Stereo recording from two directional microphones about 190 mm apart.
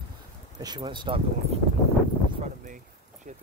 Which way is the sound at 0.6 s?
20° right (ahead or behind).